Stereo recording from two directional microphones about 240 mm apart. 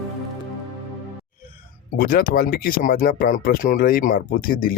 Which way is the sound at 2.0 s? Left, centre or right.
Left.